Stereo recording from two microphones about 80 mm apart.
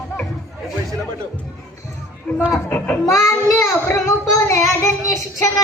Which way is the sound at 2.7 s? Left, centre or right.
Centre.